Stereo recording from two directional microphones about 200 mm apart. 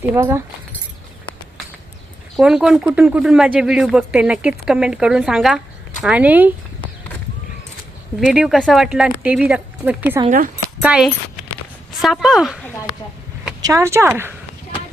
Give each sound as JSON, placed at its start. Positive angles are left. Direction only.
{"t": 0.1, "sound": "speech", "side_deg": -10}
{"t": 2.3, "sound": "speech", "side_deg": 0}
{"t": 8.2, "sound": "speech", "side_deg": 0}
{"t": 10.2, "sound": "speech", "side_deg": -45}
{"t": 10.8, "sound": "speech", "side_deg": -5}
{"t": 13.6, "sound": "speech", "side_deg": -15}